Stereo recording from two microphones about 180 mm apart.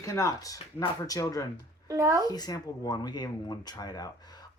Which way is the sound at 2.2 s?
20° left (ahead or behind).